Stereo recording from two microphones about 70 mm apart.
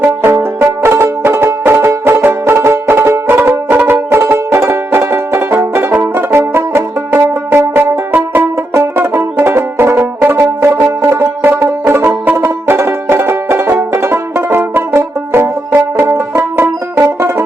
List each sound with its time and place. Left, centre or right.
0.0 s music: right
3.2 s music: right
11.5 s music: right